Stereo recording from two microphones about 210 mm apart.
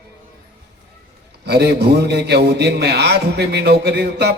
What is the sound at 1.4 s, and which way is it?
Speech, 50° right (ahead or behind).